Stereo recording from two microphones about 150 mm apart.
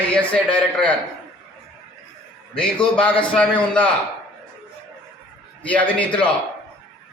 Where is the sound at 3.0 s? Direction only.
10° left (ahead or behind).